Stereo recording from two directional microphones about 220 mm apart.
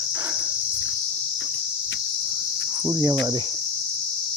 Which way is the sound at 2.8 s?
10° right (ahead or behind).